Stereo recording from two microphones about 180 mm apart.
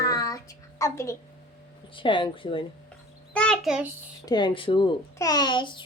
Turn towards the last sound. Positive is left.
turn(degrees=25)  # may be behind; listen again after turning